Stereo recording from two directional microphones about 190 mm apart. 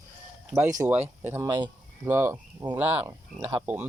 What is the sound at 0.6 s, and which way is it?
Speech, 20° right (ahead or behind).